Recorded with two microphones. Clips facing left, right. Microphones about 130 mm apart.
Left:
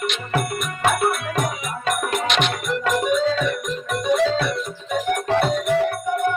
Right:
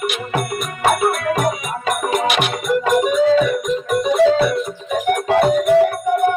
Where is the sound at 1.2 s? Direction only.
55° right (ahead or behind).